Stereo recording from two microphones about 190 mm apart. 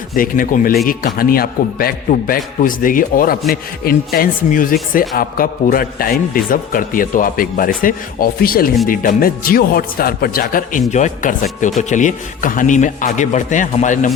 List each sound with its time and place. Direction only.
0.1 s a man's voice: 45° left (ahead or behind)